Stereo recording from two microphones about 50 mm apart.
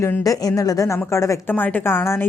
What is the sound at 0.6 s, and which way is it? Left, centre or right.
Speech, left.